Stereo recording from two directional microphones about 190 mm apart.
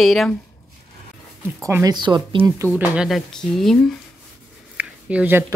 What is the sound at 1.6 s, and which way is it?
Speech, 20° right (ahead or behind).